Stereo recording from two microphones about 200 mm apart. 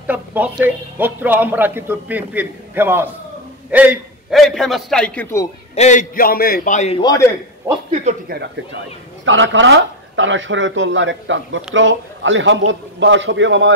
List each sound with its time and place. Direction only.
0.0 s a man's voice: 10° right (ahead or behind); by 5.5 s 10° left (ahead or behind)
5.8 s a man's voice: 40° left (ahead or behind)
7.0 s a man's voice: 20° left (ahead or behind)
7.9 s speech: 35° right (ahead or behind)
9.2 s a man's voice: 70° right (ahead or behind)